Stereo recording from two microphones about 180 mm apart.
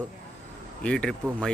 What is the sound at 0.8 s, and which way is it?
Speech, 5° left (ahead or behind).